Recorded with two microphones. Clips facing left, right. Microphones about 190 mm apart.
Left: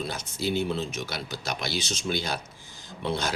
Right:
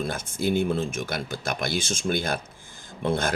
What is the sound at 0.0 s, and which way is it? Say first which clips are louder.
Speech: right 4 dB; 50° right (ahead or behind).